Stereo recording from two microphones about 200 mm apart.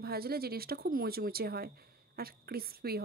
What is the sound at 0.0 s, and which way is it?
Speech, 50° right (ahead or behind).